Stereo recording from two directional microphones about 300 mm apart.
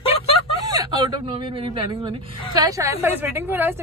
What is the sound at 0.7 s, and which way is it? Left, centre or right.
Speech, centre.